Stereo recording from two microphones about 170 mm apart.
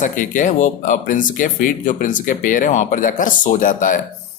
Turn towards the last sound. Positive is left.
turn(degrees=50)  # may be behind; listen again after turning